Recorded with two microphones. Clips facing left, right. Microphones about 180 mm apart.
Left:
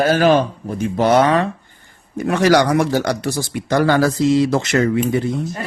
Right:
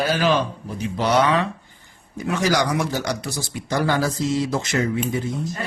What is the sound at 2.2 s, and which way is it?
Speech, 60° left (ahead or behind).